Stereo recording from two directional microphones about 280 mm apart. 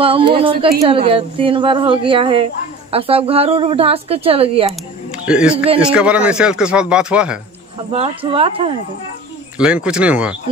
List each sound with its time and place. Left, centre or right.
0.0 s speech: centre
5.1 s a man's voice: centre
7.9 s speech: centre
9.6 s a man's voice: centre